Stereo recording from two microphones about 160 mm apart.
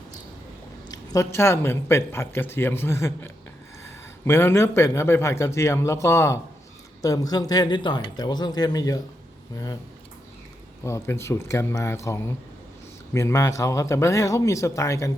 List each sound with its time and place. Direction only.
0.9 s a man's voice: 20° left (ahead or behind)
10.8 s a man's voice: 15° left (ahead or behind)